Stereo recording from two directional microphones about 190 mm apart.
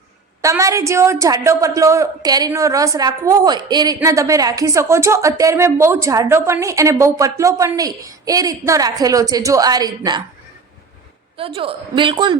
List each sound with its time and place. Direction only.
0.4 s a woman's voice: 15° right (ahead or behind)
11.3 s a woman's voice: 30° right (ahead or behind)